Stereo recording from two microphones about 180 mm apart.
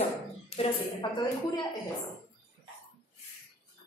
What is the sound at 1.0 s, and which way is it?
Speech, 25° left (ahead or behind).